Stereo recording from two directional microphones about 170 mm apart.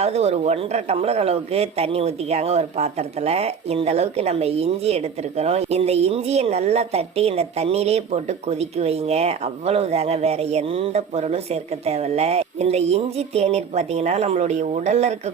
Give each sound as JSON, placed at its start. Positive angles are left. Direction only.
{"t": 0.0, "sound": "speech", "side_deg": -40}